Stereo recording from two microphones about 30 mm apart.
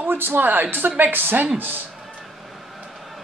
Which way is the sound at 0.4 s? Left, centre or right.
Right.